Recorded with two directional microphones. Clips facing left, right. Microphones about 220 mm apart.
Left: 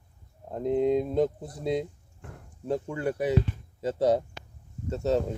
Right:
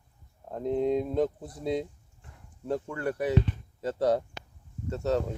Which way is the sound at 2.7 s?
20° left (ahead or behind).